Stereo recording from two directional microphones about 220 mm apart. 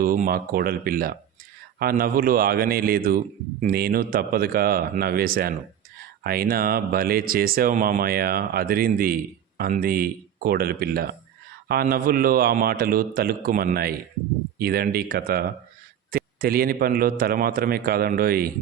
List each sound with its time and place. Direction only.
0.0 s a man's voice: 40° right (ahead or behind)